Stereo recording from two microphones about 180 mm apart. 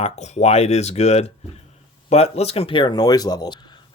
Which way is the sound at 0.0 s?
35° left (ahead or behind).